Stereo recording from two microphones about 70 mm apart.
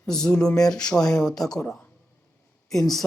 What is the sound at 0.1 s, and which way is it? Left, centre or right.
Speech, centre.